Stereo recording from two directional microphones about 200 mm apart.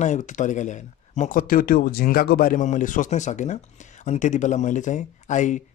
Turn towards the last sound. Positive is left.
turn(degrees=40)  # may be behind; listen again after turning